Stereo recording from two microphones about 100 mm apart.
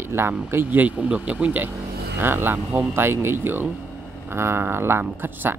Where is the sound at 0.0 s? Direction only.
25° right (ahead or behind).